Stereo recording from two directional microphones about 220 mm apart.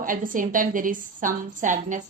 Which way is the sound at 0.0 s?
40° right (ahead or behind).